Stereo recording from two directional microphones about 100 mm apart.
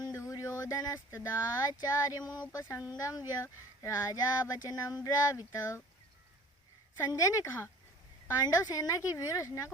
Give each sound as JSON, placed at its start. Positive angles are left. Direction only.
{"t": 0.0, "sound": "speech", "side_deg": 35}
{"t": 7.1, "sound": "speech", "side_deg": 35}